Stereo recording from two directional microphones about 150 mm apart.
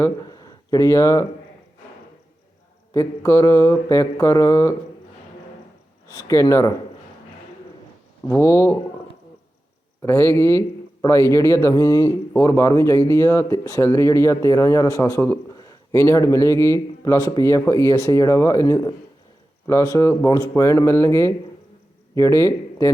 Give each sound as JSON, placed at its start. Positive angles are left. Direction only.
{"t": 0.3, "sound": "a sound", "side_deg": 25}
{"t": 2.9, "sound": "speech", "side_deg": 20}
{"t": 6.2, "sound": "speech", "side_deg": 20}
{"t": 8.3, "sound": "speech", "side_deg": 20}
{"t": 10.0, "sound": "a man's voice", "side_deg": 15}